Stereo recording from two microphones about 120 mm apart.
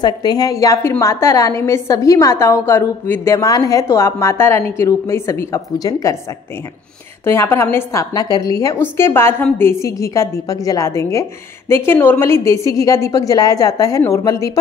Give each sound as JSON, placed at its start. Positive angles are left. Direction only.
{"t": 0.0, "sound": "a woman's voice", "side_deg": 35}
{"t": 7.2, "sound": "a woman's voice", "side_deg": 20}